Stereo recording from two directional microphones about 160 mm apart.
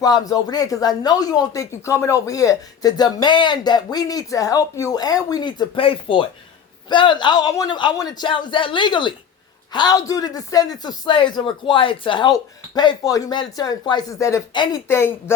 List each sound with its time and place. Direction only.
0.0 s speech: 25° left (ahead or behind)
14.5 s speech: 30° left (ahead or behind)
14.8 s a woman's voice: 15° left (ahead or behind)